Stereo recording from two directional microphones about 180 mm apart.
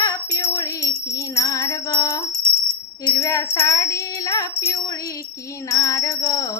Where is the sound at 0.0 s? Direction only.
15° left (ahead or behind).